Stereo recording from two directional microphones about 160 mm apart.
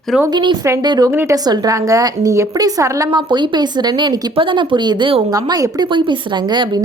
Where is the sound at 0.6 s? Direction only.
15° right (ahead or behind).